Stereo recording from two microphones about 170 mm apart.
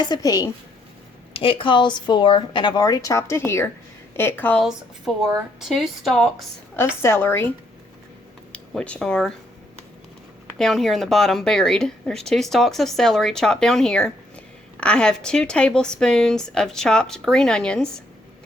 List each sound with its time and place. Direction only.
0.0 s a woman's voice: 25° left (ahead or behind)
1.3 s a woman's voice: 30° left (ahead or behind); by 4.6 s 10° left (ahead or behind)
5.5 s a woman's voice: centre (ahead or behind)
6.7 s a woman's voice: 15° left (ahead or behind)
8.5 s speech: 5° left (ahead or behind)
10.6 s a woman's voice: centre (ahead or behind)